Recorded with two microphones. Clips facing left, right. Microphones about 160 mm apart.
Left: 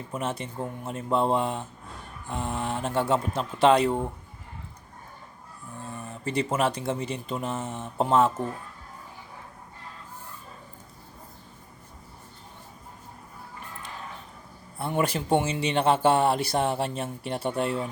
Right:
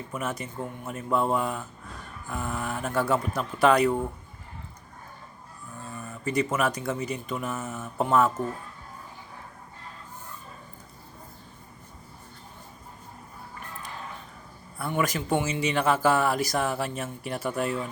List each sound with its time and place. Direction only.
0.1 s speech: 30° left (ahead or behind)
6.1 s speech: 30° left (ahead or behind)
14.8 s speech: 30° left (ahead or behind)